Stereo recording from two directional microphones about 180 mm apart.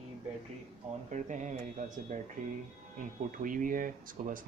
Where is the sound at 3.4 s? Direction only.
45° right (ahead or behind).